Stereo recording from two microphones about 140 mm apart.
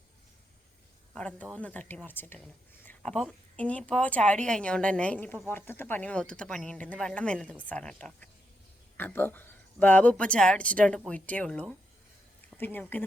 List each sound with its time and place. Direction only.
1.1 s speech: 10° left (ahead or behind)